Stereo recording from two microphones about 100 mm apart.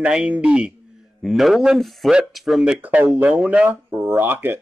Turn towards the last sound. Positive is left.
turn(degrees=-20)  # may be behind; listen again after turning